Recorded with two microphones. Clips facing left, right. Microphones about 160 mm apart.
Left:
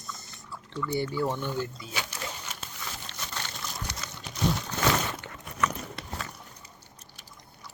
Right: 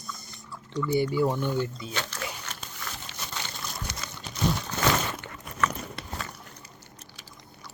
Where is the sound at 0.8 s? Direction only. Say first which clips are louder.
Right 4 dB; 15° right (ahead or behind).